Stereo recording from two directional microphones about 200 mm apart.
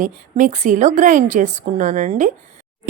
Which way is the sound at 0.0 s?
40° right (ahead or behind).